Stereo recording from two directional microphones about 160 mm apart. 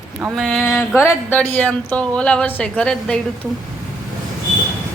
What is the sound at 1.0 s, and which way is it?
A woman's voice, 10° left (ahead or behind).